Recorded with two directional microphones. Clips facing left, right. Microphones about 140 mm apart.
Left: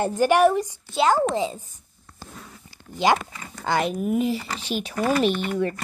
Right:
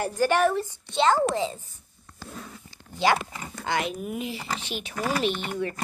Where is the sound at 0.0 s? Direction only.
25° left (ahead or behind); by 1.1 s 5° left (ahead or behind).